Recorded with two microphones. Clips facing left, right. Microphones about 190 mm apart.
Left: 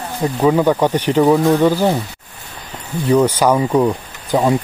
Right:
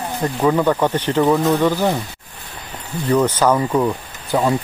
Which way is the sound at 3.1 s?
10° left (ahead or behind).